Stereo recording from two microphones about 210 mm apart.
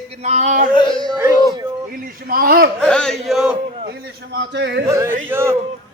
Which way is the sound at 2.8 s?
5° left (ahead or behind).